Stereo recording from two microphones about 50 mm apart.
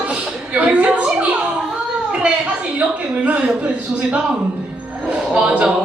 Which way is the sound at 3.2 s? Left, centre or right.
Right.